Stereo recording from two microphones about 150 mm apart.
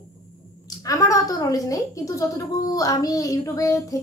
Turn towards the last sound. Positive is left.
turn(degrees=20)  # may be behind; listen again after turning